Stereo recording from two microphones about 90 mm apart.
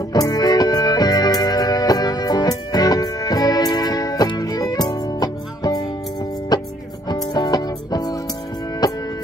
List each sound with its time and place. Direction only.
0.1 s music: 45° left (ahead or behind)